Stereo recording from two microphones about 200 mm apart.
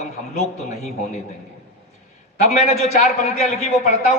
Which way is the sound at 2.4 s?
35° left (ahead or behind).